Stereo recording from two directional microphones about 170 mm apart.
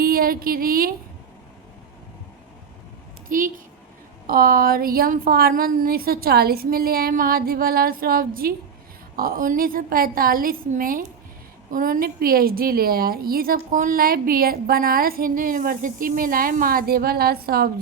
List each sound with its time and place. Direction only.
0.0 s speech: 60° right (ahead or behind)
3.2 s a woman's voice: 55° right (ahead or behind)